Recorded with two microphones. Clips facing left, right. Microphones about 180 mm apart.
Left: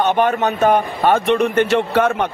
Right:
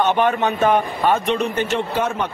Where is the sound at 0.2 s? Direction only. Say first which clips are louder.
Left 2 dB; 40° left (ahead or behind).